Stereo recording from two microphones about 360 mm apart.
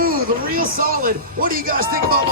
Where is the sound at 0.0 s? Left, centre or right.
Right.